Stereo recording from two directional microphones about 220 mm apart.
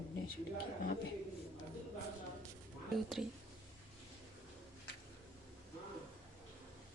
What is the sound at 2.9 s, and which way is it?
Speech, centre (ahead or behind).